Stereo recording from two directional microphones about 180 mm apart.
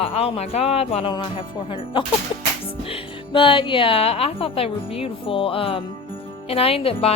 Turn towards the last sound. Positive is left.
turn(degrees=35)  # may be behind; listen again after turning